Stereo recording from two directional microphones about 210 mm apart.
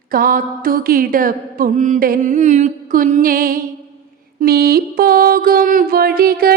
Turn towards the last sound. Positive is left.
turn(degrees=-45)  # may be behind; listen again after turning